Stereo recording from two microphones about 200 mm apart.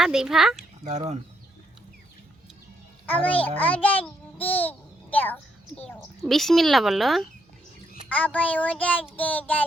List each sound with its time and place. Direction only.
0.0 s speech: centre (ahead or behind)
0.9 s speech: 35° right (ahead or behind)
3.1 s a child's voice: 10° left (ahead or behind)